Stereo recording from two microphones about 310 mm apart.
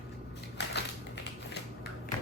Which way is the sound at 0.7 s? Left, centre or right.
Left.